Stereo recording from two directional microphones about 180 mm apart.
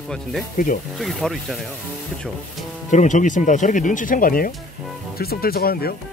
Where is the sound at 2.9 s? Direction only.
40° left (ahead or behind); by 6.0 s 60° left (ahead or behind).